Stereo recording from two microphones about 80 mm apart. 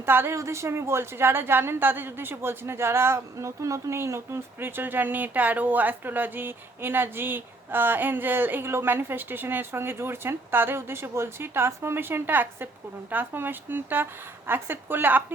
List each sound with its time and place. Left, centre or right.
0.0 s a woman's voice: right